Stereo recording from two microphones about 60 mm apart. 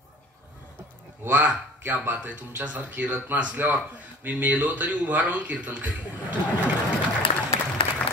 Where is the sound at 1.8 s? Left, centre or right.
Right.